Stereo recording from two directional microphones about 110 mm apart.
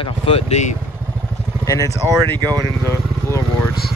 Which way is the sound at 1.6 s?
30° left (ahead or behind).